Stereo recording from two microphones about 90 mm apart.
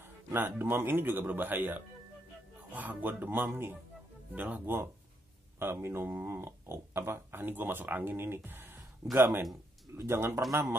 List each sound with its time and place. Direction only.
0.3 s speech: 25° right (ahead or behind)